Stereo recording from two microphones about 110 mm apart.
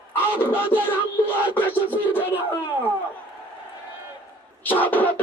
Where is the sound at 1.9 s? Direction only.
20° left (ahead or behind).